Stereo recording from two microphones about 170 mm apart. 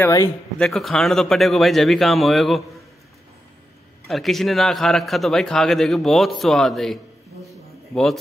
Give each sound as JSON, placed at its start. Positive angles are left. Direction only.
{"t": 0.0, "sound": "speech", "side_deg": 20}
{"t": 0.6, "sound": "speech", "side_deg": 0}
{"t": 4.1, "sound": "speech", "side_deg": 0}